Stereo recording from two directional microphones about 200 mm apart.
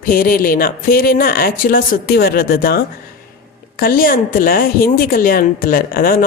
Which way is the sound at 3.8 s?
45° left (ahead or behind).